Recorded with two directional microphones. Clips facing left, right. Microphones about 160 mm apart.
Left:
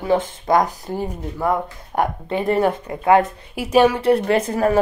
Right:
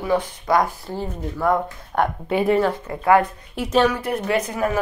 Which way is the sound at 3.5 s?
10° left (ahead or behind).